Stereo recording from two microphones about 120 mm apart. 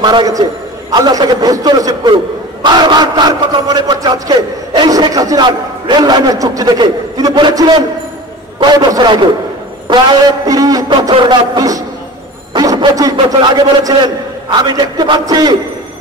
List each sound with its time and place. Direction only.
0.0 s a man's voice: 35° right (ahead or behind)